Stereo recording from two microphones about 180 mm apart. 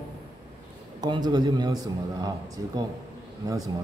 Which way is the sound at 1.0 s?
20° right (ahead or behind).